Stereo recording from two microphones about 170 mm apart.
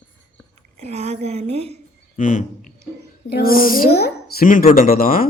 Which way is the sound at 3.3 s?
60° left (ahead or behind).